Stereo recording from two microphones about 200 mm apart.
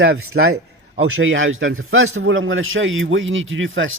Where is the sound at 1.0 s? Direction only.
80° right.